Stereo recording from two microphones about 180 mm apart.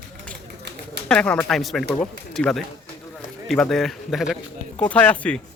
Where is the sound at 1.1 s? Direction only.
5° left (ahead or behind).